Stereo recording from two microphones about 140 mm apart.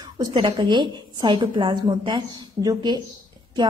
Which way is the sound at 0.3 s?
35° right (ahead or behind).